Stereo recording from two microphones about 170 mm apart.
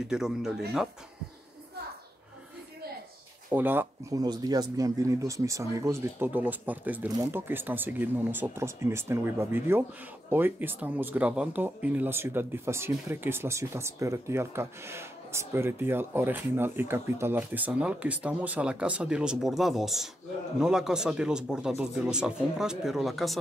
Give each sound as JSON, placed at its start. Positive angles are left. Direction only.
{"t": 0.0, "sound": "speech", "side_deg": -5}
{"t": 3.4, "sound": "speech", "side_deg": -10}